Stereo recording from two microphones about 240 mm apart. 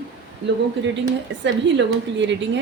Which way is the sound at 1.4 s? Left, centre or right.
Right.